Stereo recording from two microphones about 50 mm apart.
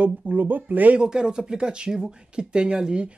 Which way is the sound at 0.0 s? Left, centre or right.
Right.